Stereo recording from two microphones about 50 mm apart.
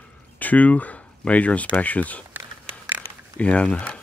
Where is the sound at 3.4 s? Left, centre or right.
Left.